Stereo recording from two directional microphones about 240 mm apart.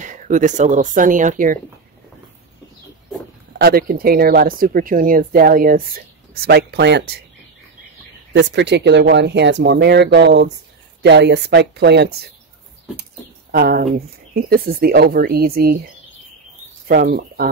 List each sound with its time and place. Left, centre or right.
0.0 s speech: right
3.5 s speech: right
8.3 s speech: right
13.5 s speech: right
16.8 s speech: right